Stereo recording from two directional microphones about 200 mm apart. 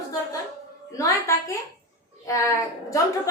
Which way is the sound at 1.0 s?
15° left (ahead or behind).